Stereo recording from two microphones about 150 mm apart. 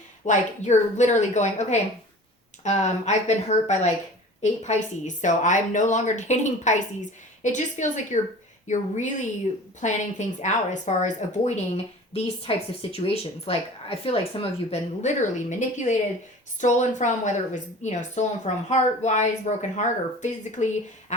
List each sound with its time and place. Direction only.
0.3 s a woman's voice: 50° left (ahead or behind)
12.1 s a woman's voice: 40° left (ahead or behind)